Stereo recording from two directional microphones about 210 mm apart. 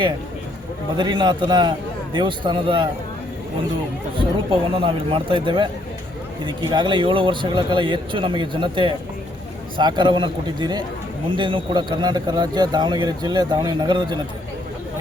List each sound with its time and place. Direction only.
0.9 s speech: 20° right (ahead or behind)
4.8 s speech: 25° right (ahead or behind)